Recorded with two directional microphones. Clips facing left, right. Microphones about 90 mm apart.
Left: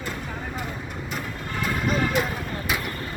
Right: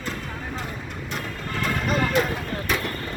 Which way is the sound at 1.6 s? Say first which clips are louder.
Even; 5° left (ahead or behind).